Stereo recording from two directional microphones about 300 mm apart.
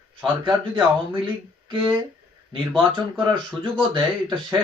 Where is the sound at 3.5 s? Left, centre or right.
Centre.